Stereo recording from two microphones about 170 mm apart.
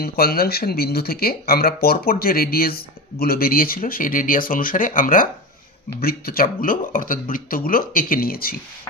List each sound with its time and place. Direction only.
0.0 s speech: 65° left (ahead or behind)